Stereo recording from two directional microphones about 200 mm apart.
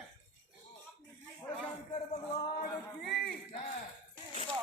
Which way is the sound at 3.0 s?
55° left (ahead or behind).